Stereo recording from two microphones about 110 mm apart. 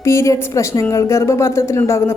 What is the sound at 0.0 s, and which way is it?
A woman's voice, 25° left (ahead or behind).